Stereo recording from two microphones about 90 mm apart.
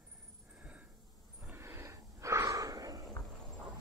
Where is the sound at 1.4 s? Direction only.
25° right (ahead or behind); by 3.0 s 45° right (ahead or behind).